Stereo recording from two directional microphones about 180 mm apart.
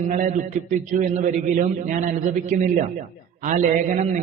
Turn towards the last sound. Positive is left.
turn(degrees=-45)  # may be behind; listen again after turning